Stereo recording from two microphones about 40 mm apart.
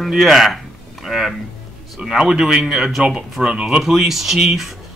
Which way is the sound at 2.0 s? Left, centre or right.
Centre.